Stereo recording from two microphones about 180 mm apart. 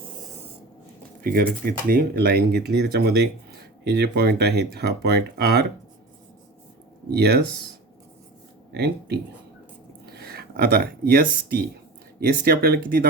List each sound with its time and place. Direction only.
1.2 s speech: 55° right (ahead or behind)
7.1 s speech: 65° right (ahead or behind)
8.7 s speech: 65° right (ahead or behind)